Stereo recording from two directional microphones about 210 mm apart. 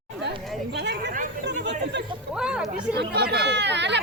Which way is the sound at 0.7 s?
55° right (ahead or behind).